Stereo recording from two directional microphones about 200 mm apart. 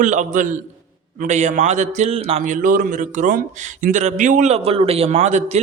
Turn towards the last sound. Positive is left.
turn(degrees=-35)  # may be behind; listen again after turning